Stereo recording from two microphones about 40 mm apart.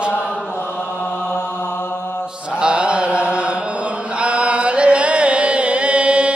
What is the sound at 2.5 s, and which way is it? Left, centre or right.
Chant, right.